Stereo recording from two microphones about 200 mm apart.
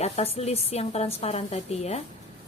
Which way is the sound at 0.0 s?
30° left (ahead or behind).